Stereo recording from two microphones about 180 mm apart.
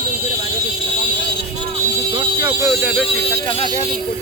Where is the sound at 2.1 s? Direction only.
20° right (ahead or behind).